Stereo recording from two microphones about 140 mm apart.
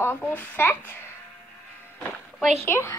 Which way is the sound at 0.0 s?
15° left (ahead or behind).